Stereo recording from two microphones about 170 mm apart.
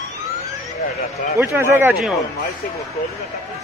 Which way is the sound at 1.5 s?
15° right (ahead or behind).